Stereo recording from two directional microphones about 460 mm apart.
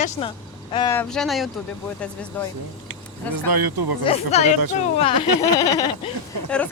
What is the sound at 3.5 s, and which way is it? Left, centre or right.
Speech, right.